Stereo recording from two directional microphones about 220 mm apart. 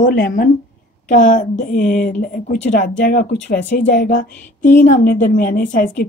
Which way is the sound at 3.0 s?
35° left (ahead or behind).